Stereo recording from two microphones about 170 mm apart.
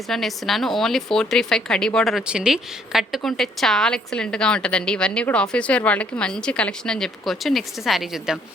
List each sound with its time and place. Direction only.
0.1 s a woman's voice: centre (ahead or behind)